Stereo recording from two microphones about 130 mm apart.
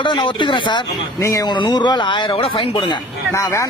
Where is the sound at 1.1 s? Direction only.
25° left (ahead or behind); by 2.9 s 40° left (ahead or behind).